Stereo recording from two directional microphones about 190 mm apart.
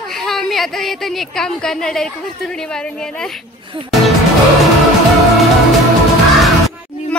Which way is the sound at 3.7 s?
25° right (ahead or behind).